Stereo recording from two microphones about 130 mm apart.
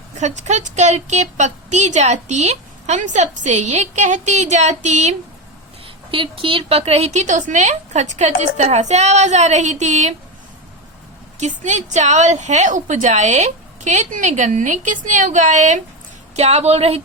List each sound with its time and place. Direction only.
0.2 s a woman's voice: 65° right (ahead or behind)
6.1 s a woman's voice: 40° right (ahead or behind); by 10.2 s 65° right (ahead or behind)
11.3 s a woman's voice: 65° right (ahead or behind)
16.3 s a woman's voice: 55° right (ahead or behind)